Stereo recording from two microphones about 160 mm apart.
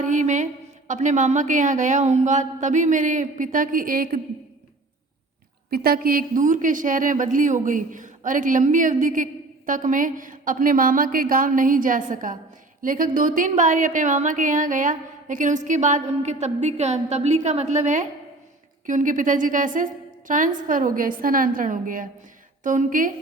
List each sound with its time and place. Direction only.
0.0 s a woman's voice: 50° right (ahead or behind)
5.7 s a woman's voice: 70° right (ahead or behind)